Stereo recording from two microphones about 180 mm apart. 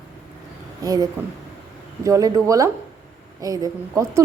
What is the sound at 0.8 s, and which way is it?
Speech, 20° right (ahead or behind).